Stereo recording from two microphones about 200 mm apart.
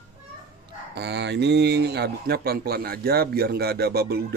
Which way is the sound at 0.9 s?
55° right (ahead or behind).